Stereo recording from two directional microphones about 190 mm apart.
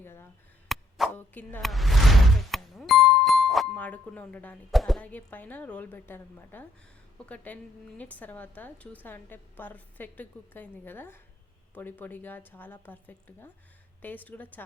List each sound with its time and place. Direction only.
0.0 s a sound: 10° left (ahead or behind)
0.7 s chop: centre (ahead or behind)
1.1 s speech: 10° left (ahead or behind)